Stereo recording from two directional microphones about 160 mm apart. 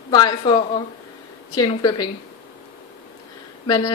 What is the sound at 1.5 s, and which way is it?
Speech, 25° left (ahead or behind).